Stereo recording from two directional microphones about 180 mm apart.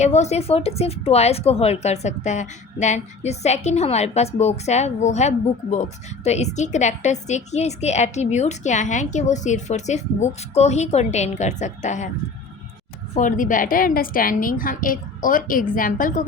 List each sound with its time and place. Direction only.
0.0 s a woman's voice: 40° left (ahead or behind)
13.1 s a woman's voice: 45° left (ahead or behind)